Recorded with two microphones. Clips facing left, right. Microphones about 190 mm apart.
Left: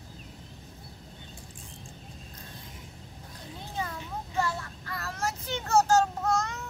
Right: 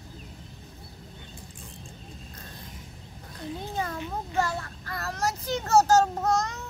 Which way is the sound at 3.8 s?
65° right (ahead or behind).